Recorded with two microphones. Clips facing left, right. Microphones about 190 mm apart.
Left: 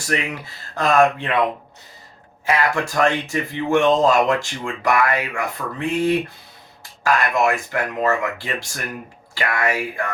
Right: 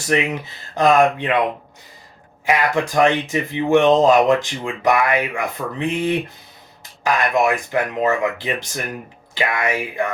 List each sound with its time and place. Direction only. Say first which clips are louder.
0.1 s speech: right 5 dB; 20° right (ahead or behind)
2.5 s speech: right 2 dB; 20° right (ahead or behind)